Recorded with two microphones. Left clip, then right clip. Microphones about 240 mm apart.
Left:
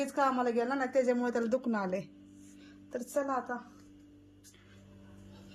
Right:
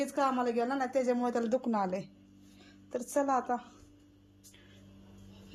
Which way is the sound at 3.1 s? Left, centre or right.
Centre.